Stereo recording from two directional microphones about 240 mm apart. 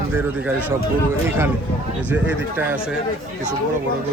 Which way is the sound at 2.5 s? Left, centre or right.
Centre.